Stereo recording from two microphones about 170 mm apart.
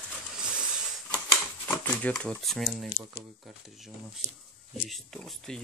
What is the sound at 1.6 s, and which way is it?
Speech, 10° left (ahead or behind).